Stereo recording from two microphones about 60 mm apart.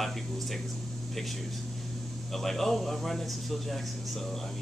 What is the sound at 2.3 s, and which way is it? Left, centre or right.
Speech, centre.